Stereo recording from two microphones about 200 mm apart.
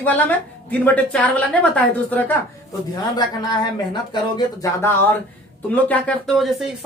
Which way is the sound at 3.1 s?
20° left (ahead or behind).